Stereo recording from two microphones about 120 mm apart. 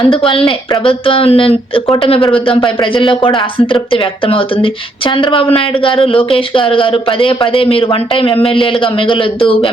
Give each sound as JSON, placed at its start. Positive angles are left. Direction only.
{"t": 0.1, "sound": "speech", "side_deg": 50}